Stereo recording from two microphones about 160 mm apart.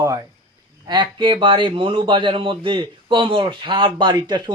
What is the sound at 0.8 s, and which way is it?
Speech, 30° right (ahead or behind).